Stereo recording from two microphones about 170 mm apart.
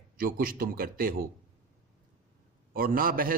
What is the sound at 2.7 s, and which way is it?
Speech, 55° right (ahead or behind).